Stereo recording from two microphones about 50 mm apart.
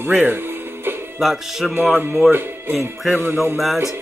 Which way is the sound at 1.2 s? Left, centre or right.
Centre.